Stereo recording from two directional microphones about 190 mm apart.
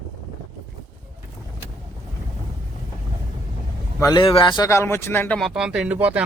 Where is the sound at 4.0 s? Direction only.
15° left (ahead or behind).